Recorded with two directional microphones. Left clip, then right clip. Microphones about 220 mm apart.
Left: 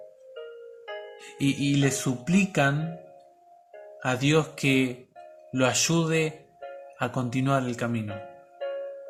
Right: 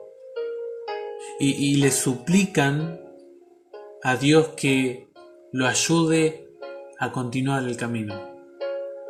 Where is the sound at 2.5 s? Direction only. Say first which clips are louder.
Right 1 dB; 5° left (ahead or behind).